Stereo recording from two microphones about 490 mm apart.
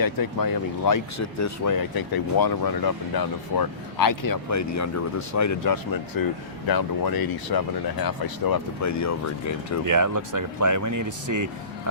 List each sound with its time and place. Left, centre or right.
0.0 s speech: left
9.8 s speech: right